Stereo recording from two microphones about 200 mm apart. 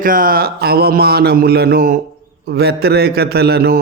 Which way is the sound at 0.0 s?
45° right (ahead or behind).